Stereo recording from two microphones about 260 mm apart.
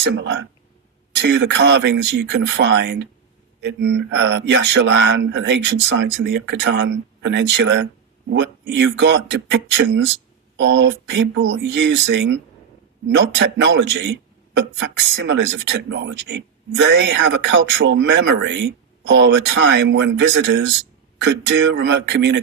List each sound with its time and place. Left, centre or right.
0.0 s speech: right